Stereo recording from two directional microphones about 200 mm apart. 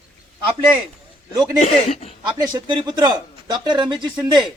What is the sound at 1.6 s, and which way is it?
Speech, 30° left (ahead or behind).